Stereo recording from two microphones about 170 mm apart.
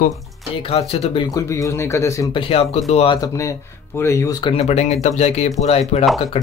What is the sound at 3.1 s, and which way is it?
Speech, 20° left (ahead or behind).